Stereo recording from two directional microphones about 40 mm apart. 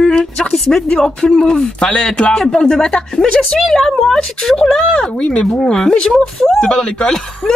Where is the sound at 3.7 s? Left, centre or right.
Centre.